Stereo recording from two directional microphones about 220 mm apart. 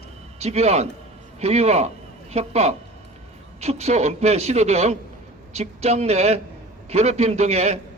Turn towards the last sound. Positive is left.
turn(degrees=-30)  # may be behind; listen again after turning